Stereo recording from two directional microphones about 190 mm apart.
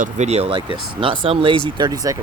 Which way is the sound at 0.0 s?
35° right (ahead or behind).